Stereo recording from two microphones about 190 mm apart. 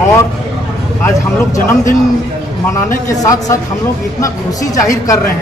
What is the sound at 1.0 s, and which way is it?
Speech, 15° left (ahead or behind).